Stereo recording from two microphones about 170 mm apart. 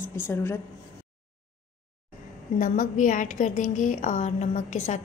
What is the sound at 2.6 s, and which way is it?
A woman's voice, 50° left (ahead or behind).